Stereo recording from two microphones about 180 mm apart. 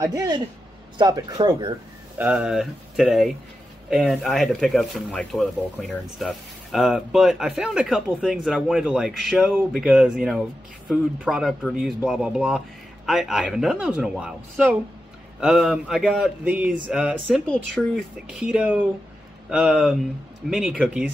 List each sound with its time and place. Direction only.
0.0 s a man's voice: 20° right (ahead or behind)
2.1 s speech: 5° right (ahead or behind)